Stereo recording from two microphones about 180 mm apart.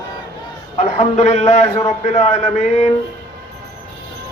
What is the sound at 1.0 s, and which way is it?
A man's voice, 35° left (ahead or behind).